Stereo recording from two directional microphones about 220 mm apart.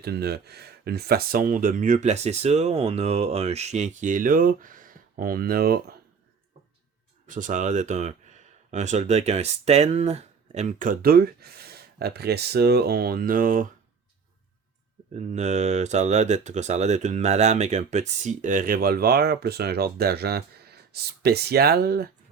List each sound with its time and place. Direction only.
0.0 s speech: 45° right (ahead or behind)
7.3 s speech: 35° right (ahead or behind)
15.1 s speech: 30° right (ahead or behind)